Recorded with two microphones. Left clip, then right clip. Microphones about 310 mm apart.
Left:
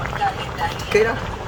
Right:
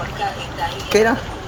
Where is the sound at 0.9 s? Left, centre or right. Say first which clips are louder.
Right 3 dB; right.